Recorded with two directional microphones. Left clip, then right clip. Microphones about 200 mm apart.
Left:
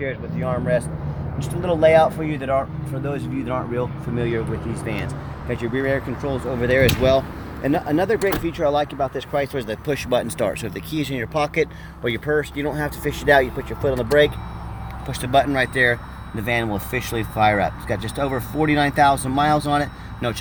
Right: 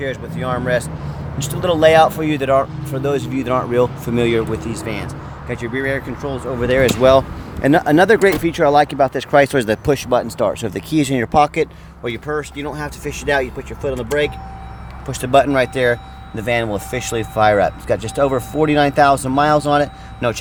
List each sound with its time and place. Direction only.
0.0 s speech: 40° right (ahead or behind)
1.4 s speech: 50° right (ahead or behind)
5.5 s speech: 5° right (ahead or behind)
6.6 s speech: 30° right (ahead or behind)
9.9 s speech: 25° right (ahead or behind)
10.8 s speech: 30° right (ahead or behind)
12.0 s speech: 5° right (ahead or behind)
15.2 s speech: 35° right (ahead or behind)